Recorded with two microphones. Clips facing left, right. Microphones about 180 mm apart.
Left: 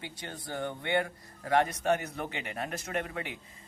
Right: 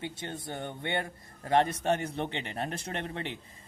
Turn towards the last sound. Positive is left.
turn(degrees=-30)  # may be behind; listen again after turning